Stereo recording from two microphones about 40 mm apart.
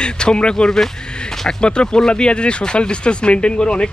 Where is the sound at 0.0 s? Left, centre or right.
Left.